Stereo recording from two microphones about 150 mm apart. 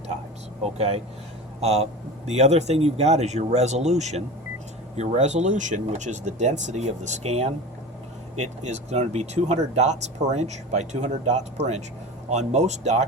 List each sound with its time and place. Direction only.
0.6 s speech: 45° right (ahead or behind)